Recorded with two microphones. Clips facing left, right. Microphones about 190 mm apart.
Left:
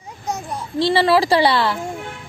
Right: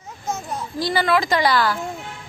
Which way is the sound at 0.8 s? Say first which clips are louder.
Left 5 dB; 30° left (ahead or behind).